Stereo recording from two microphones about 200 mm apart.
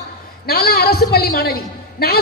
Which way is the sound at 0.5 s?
50° left (ahead or behind).